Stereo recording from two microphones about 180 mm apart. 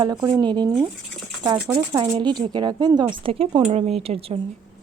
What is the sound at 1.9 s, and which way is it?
Speech, 25° right (ahead or behind).